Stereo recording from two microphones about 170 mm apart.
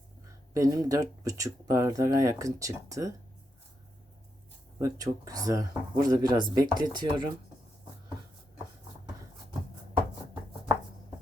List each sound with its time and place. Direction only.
0.5 s speech: 20° right (ahead or behind)
4.8 s speech: 20° right (ahead or behind)